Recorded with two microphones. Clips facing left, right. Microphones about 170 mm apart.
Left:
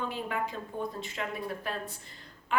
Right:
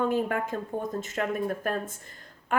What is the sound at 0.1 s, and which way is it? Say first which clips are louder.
A woman's voice: right 7 dB; 50° right (ahead or behind).